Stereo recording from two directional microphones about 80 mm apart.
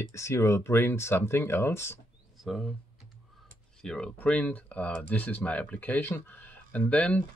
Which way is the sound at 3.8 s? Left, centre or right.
Centre.